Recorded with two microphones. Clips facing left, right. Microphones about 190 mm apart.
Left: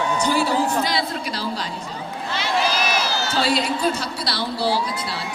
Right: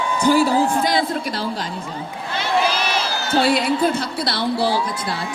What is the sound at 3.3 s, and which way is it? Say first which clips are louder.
A woman's voice: right 6 dB; 55° right (ahead or behind).